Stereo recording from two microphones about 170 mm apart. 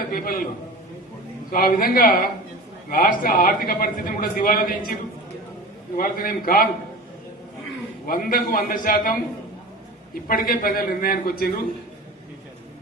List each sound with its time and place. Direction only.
0.1 s a sound: 60° left (ahead or behind)
1.5 s speech: 60° left (ahead or behind)
6.0 s speech: 55° left (ahead or behind)
8.0 s speech: 60° left (ahead or behind)
10.2 s speech: 60° left (ahead or behind)